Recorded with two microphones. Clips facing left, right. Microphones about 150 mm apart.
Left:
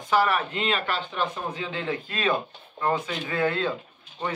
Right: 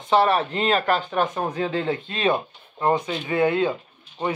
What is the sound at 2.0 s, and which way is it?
A man's voice, 25° right (ahead or behind).